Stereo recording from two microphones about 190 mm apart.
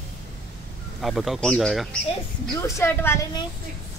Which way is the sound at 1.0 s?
Centre (ahead or behind).